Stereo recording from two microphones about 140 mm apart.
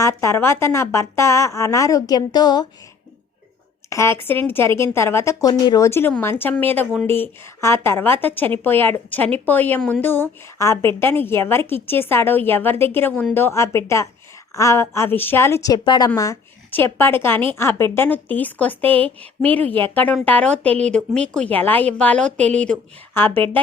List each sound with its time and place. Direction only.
0.0 s a woman's voice: 20° left (ahead or behind)
3.8 s a woman's voice: 20° left (ahead or behind)